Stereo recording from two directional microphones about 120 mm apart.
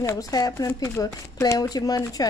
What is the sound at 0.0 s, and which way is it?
A woman's voice, 30° left (ahead or behind).